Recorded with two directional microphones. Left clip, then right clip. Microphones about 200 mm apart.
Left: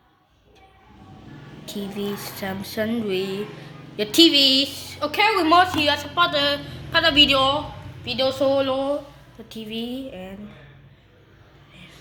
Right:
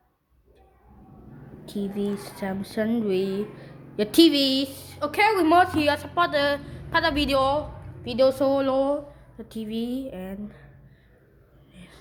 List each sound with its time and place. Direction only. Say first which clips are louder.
1.6 s a woman's voice: even; 20° right (ahead or behind)
5.4 s a woman's voice: left 2 dB; 30° right (ahead or behind)